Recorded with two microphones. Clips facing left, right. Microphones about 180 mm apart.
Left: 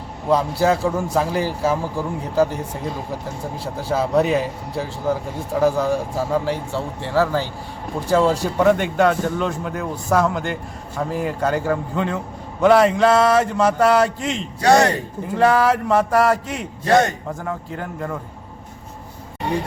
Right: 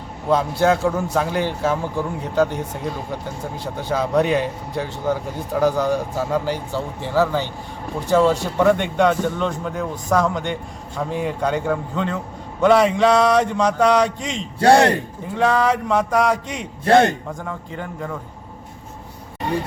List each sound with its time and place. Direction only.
0.6 s speech: centre (ahead or behind)
14.6 s a man's voice: 30° right (ahead or behind)
15.4 s speech: 5° left (ahead or behind)
16.8 s a man's voice: 30° right (ahead or behind)
17.2 s speech: centre (ahead or behind)